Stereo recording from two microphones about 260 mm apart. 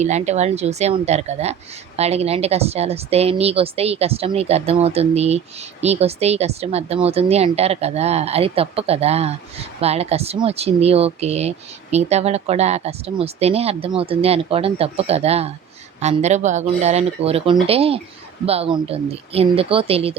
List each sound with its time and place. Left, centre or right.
0.0 s speech: right